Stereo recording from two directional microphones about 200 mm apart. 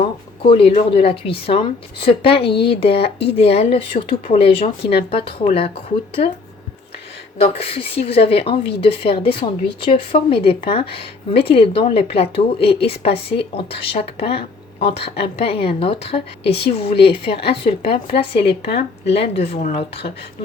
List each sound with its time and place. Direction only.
0.4 s a woman's voice: 30° left (ahead or behind)
7.3 s a woman's voice: 30° left (ahead or behind)